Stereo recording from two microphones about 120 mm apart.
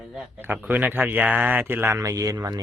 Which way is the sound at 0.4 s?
15° right (ahead or behind).